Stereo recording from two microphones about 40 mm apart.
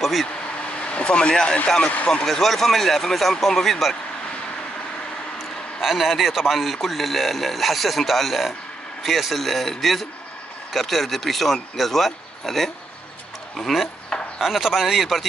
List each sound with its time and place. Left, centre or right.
0.0 s speech: centre
0.7 s speech: left
1.8 s speech: left
2.2 s speech: centre
5.8 s a man's voice: centre